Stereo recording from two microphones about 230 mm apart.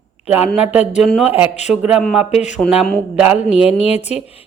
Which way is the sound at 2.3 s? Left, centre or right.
Left.